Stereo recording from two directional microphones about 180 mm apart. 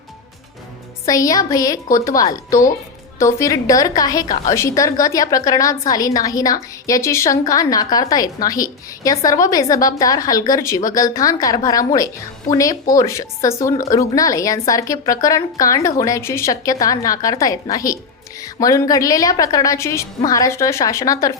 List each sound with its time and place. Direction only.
1.0 s a woman's voice: 20° left (ahead or behind)